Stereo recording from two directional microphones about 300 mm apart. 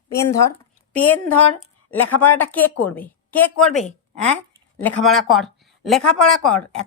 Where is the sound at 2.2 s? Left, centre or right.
Centre.